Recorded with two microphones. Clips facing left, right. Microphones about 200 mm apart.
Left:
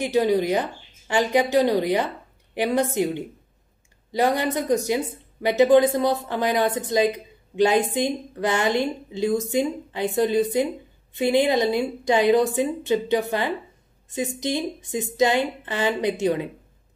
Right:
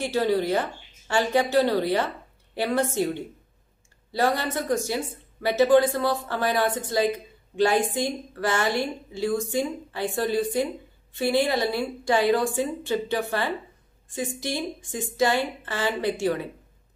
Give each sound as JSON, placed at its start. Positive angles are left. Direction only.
{"t": 0.0, "sound": "a woman's voice", "side_deg": 15}